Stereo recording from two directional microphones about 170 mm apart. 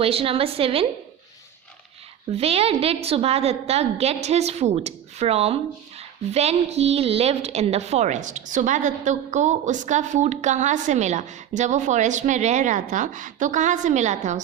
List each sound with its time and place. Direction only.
0.0 s a woman's voice: 35° right (ahead or behind)
2.3 s a woman's voice: 35° right (ahead or behind)